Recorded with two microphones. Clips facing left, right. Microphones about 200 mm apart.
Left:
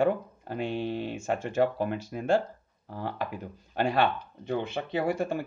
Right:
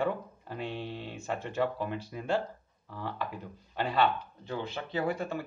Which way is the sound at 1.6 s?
65° left (ahead or behind).